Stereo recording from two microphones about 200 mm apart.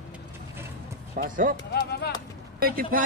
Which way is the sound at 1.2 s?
45° right (ahead or behind).